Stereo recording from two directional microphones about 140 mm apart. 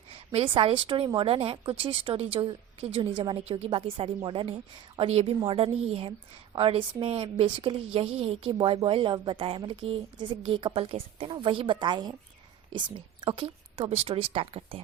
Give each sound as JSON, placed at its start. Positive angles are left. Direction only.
{"t": 0.3, "sound": "a woman's voice", "side_deg": -40}